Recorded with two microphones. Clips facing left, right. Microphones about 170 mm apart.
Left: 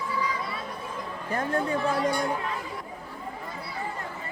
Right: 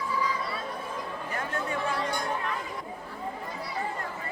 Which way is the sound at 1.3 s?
35° left (ahead or behind).